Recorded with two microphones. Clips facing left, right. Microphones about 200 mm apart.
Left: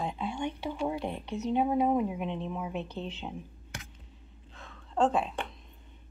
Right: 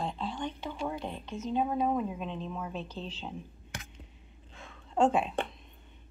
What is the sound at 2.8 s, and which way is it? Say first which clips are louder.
Speech: left 3 dB; 60° left (ahead or behind).